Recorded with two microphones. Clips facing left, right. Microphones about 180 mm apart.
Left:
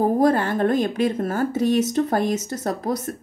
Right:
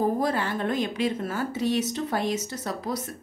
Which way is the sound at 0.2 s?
50° left (ahead or behind).